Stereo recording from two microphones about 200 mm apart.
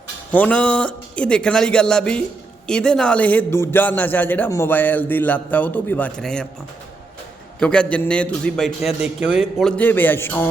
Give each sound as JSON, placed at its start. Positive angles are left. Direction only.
{"t": 0.3, "sound": "a man's voice", "side_deg": 10}
{"t": 7.6, "sound": "a man's voice", "side_deg": 5}